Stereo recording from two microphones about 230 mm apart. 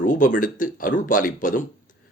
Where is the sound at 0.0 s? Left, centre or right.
Left.